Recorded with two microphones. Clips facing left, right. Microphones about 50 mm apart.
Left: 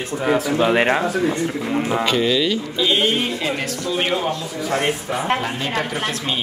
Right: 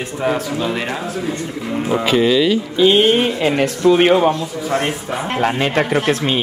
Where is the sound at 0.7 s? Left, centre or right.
Left.